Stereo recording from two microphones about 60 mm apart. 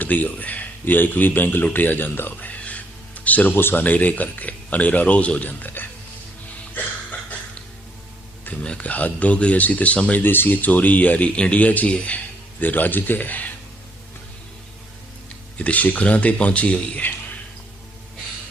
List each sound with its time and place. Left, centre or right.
0.0 s speech: left
6.7 s a sound: left
8.6 s speech: centre
15.5 s speech: left